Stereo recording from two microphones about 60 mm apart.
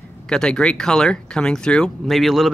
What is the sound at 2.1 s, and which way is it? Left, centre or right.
Speech, centre.